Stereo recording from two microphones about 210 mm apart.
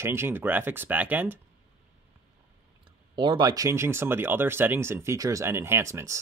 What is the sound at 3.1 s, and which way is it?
Speech, 20° right (ahead or behind).